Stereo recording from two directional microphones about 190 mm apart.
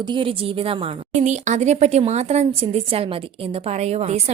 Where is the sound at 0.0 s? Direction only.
25° right (ahead or behind).